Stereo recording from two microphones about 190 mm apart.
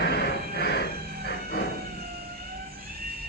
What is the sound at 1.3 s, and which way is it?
Music, 55° left (ahead or behind).